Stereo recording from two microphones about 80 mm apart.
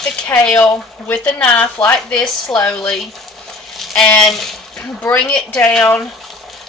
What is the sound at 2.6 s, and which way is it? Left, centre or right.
Speech, centre.